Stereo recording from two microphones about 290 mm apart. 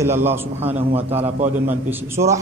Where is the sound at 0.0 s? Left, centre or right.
Centre.